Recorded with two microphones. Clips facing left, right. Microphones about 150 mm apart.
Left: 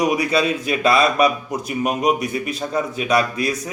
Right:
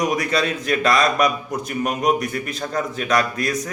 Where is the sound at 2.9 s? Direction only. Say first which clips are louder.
Left 1 dB; 10° left (ahead or behind).